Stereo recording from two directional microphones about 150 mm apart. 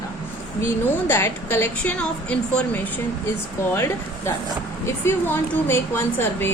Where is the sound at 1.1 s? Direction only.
15° left (ahead or behind).